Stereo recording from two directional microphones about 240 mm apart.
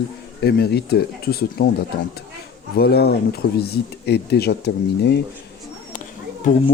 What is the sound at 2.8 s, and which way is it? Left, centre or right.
Speech, left.